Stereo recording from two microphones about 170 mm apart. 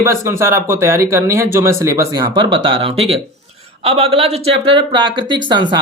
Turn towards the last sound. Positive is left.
turn(degrees=-25)  # may be behind; listen again after turning